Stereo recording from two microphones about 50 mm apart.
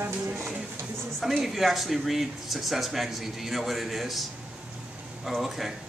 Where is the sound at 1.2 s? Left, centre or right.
Centre.